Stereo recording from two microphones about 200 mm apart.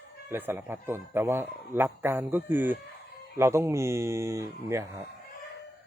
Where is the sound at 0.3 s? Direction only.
10° right (ahead or behind).